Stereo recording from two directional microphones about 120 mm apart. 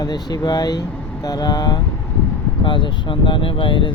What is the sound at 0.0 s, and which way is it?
Speech, 35° left (ahead or behind).